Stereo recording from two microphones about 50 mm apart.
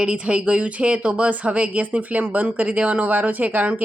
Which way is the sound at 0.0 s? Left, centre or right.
Right.